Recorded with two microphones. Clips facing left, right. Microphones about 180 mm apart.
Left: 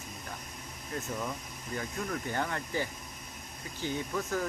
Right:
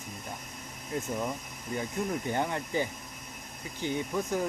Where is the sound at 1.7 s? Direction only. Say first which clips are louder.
Right 4 dB; 20° right (ahead or behind).